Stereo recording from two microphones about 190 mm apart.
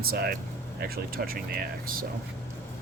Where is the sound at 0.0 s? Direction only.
55° right (ahead or behind).